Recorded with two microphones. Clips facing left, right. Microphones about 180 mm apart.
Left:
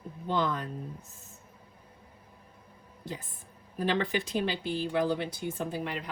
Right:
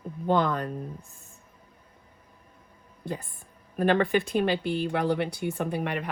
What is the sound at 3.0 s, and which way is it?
A woman's voice, 55° right (ahead or behind).